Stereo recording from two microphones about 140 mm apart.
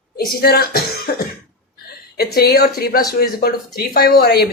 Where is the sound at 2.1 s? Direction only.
90° left.